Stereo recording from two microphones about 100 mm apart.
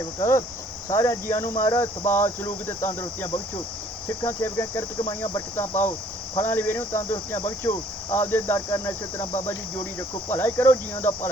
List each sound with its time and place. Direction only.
0.2 s speech: 35° left (ahead or behind)
4.3 s speech: 30° left (ahead or behind)